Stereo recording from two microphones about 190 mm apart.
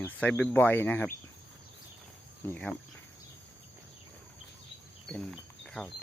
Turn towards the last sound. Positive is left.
turn(degrees=5)  # may be behind; listen again after turning